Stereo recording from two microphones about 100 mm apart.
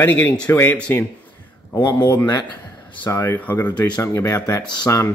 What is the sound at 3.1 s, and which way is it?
Speech, 20° left (ahead or behind).